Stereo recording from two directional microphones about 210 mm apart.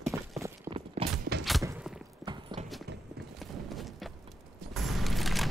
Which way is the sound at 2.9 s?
50° right (ahead or behind).